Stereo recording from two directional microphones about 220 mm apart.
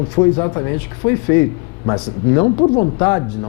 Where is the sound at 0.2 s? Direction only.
20° left (ahead or behind).